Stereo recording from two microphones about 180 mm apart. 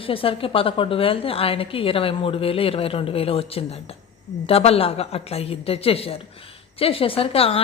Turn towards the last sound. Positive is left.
turn(degrees=30)  # may be behind; listen again after turning